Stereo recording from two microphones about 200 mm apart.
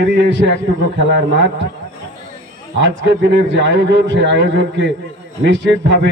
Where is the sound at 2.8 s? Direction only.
65° right (ahead or behind).